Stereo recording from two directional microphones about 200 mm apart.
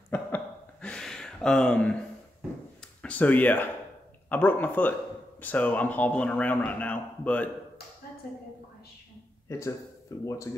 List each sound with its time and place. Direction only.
0.1 s a sound: 10° left (ahead or behind)
2.8 s a man's voice: 5° left (ahead or behind)
9.5 s a man's voice: 15° left (ahead or behind)